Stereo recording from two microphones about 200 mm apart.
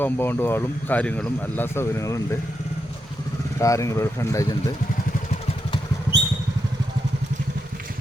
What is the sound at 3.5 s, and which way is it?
Speech, 15° left (ahead or behind).